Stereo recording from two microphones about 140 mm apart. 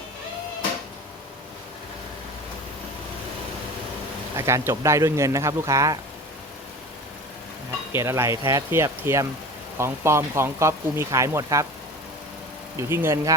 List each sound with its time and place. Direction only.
4.4 s speech: 20° right (ahead or behind)
7.9 s speech: 20° right (ahead or behind)
12.7 s speech: 15° right (ahead or behind)